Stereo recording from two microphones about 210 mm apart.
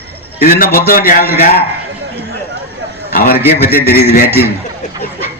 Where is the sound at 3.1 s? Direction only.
45° left (ahead or behind).